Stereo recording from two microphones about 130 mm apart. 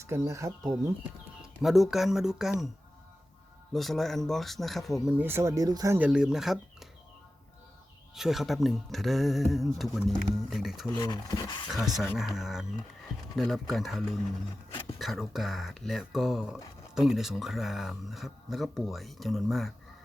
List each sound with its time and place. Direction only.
0.0 s speech: 20° right (ahead or behind)
1.4 s speech: centre (ahead or behind)
3.7 s speech: centre (ahead or behind)
5.1 s speech: 15° right (ahead or behind)
6.0 s speech: 5° right (ahead or behind)
8.1 s speech: centre (ahead or behind)
10.9 s speech: 30° left (ahead or behind)
11.7 s speech: centre (ahead or behind)